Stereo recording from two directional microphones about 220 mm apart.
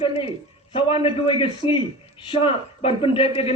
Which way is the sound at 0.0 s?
25° left (ahead or behind).